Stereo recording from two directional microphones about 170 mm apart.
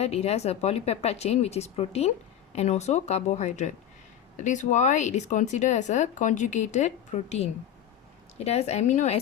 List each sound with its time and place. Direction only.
0.0 s speech: 40° left (ahead or behind)